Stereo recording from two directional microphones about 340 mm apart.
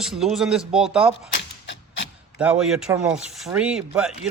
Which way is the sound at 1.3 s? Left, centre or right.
Left.